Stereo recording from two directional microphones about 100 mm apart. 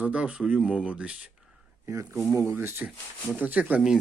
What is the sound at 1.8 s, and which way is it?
Speech, 30° right (ahead or behind).